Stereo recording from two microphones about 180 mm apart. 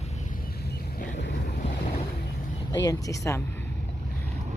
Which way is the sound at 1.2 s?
70° left (ahead or behind).